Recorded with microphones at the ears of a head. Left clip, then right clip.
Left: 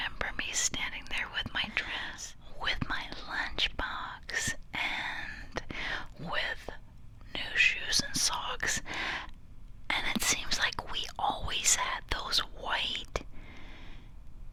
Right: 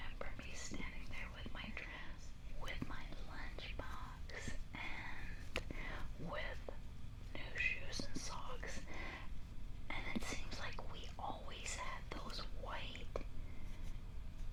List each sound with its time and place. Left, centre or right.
0.0 s whispering: left